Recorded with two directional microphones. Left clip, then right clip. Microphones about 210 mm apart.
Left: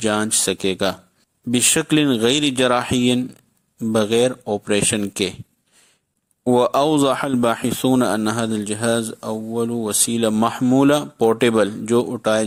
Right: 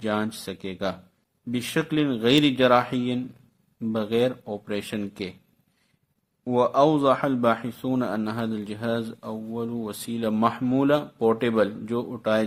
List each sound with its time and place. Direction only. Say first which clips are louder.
0.0 s speech: left 8 dB; 40° left (ahead or behind)
6.4 s speech: left 4 dB; 40° left (ahead or behind)